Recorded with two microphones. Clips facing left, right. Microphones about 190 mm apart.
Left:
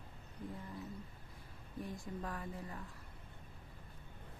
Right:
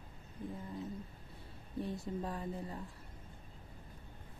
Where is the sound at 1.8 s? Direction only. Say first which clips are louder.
Right 5 dB; 30° right (ahead or behind).